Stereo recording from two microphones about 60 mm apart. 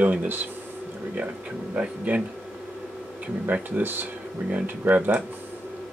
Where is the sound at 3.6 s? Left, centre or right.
Right.